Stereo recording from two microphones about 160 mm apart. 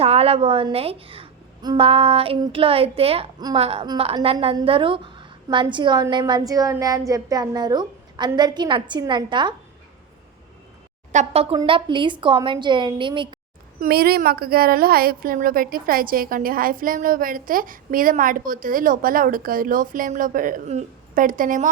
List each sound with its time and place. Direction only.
0.0 s a woman's voice: 40° right (ahead or behind)
11.1 s a woman's voice: 45° right (ahead or behind)
11.5 s a woman's voice: 30° right (ahead or behind)
13.7 s a woman's voice: 70° right (ahead or behind)